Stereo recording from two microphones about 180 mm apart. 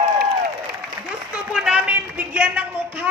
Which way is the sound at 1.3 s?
5° right (ahead or behind).